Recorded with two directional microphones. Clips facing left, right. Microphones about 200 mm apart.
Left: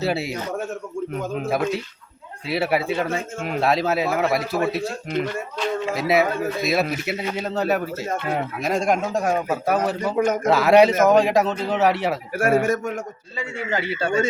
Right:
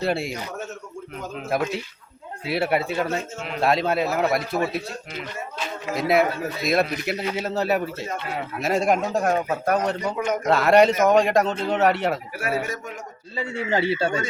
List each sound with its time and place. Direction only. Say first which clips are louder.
0.0 s a man's voice: left 1 dB; 5° left (ahead or behind)
1.5 s a man's voice: even; centre (ahead or behind)
3.3 s speech: left 5 dB; 50° left (ahead or behind)
3.6 s a man's voice: even; centre (ahead or behind)
5.9 s a man's voice: right 1 dB; centre (ahead or behind)
8.0 s speech: left 5 dB; 50° left (ahead or behind)
8.5 s a man's voice: right 2 dB; centre (ahead or behind)
12.3 s speech: left 8 dB; 50° left (ahead or behind)
13.3 s speech: right 2 dB; 30° right (ahead or behind)